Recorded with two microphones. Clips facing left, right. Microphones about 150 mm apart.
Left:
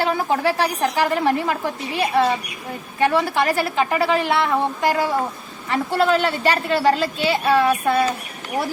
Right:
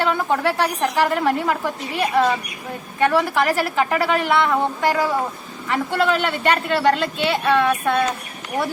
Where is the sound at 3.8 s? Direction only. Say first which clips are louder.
Even; centre (ahead or behind).